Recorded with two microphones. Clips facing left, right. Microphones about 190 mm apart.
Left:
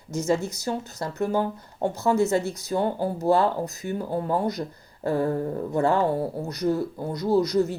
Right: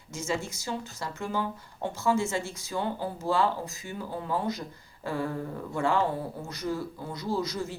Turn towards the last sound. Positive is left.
turn(degrees=40)  # may be behind; listen again after turning